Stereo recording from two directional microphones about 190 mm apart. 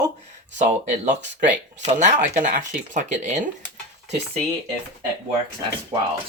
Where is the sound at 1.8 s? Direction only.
35° right (ahead or behind).